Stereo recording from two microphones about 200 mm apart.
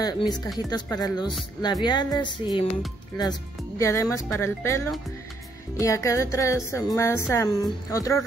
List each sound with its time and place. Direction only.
0.0 s speech: 20° left (ahead or behind)